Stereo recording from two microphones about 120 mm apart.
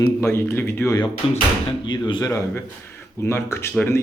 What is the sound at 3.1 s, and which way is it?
Speech, 20° left (ahead or behind).